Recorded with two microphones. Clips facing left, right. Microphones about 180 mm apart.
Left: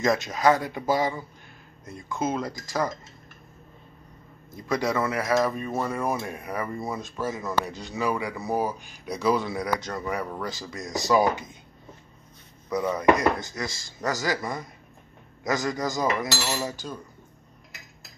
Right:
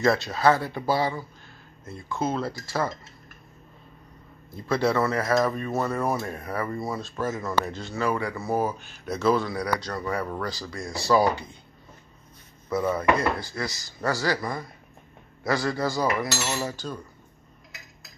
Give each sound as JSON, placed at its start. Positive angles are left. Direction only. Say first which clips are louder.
{"t": 0.0, "sound": "speech", "louder": "right 1 dB", "side_deg": 15}
{"t": 4.6, "sound": "speech", "louder": "right 2 dB", "side_deg": 15}
{"t": 10.4, "sound": "dishes", "louder": "right 1 dB", "side_deg": 20}
{"t": 11.1, "sound": "speech", "louder": "right 1 dB", "side_deg": 15}
{"t": 12.6, "sound": "speech", "louder": "right 1 dB", "side_deg": 15}
{"t": 13.1, "sound": "dishes", "louder": "left 1 dB", "side_deg": 15}
{"t": 14.2, "sound": "speech", "louder": "right 1 dB", "side_deg": 15}